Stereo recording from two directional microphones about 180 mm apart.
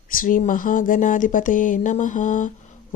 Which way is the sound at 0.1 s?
50° left (ahead or behind).